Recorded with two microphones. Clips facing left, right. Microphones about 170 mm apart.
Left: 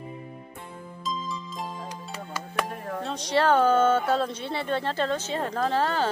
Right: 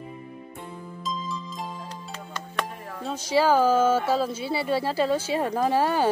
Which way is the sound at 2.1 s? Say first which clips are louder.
Left 1 dB; 5° left (ahead or behind).